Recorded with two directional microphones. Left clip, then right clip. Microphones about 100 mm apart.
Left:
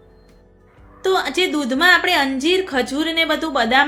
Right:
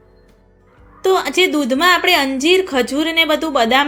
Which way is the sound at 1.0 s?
30° right (ahead or behind).